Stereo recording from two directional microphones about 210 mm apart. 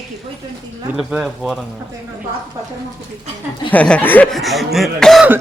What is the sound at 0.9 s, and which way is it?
Speech, centre (ahead or behind).